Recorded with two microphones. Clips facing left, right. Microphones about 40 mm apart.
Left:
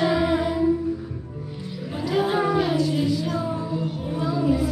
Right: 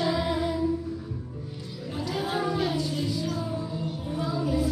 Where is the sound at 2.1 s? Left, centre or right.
Left.